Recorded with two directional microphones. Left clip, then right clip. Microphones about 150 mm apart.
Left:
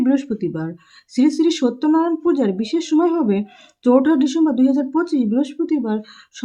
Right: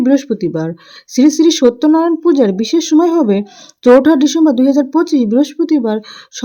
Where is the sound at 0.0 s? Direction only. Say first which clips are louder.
Right 6 dB; 40° right (ahead or behind).